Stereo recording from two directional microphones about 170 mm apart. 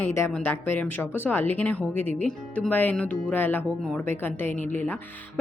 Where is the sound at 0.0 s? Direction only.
15° left (ahead or behind).